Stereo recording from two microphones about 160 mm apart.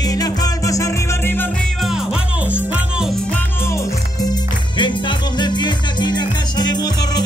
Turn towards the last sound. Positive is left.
turn(degrees=25)  # may be behind; listen again after turning